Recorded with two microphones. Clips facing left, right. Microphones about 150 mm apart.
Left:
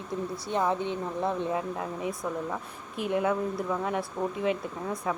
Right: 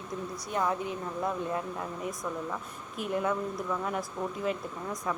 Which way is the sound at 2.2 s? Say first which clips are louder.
Left 3 dB; 25° left (ahead or behind).